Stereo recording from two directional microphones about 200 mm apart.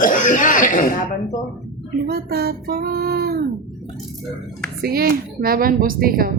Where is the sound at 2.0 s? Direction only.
50° right (ahead or behind).